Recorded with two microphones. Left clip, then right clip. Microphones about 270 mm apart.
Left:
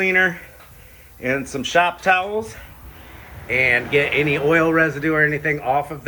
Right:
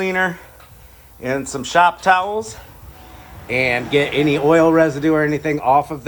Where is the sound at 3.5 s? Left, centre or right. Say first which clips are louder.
Even; centre.